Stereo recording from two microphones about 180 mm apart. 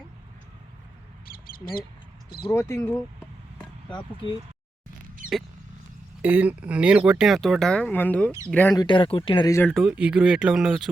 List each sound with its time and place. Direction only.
1.2 s a sound: 55° left (ahead or behind)
2.4 s speech: 15° left (ahead or behind)
6.2 s speech: 10° right (ahead or behind); by 8.7 s 10° left (ahead or behind)
8.7 s speech: 25° left (ahead or behind)
9.6 s speech: centre (ahead or behind)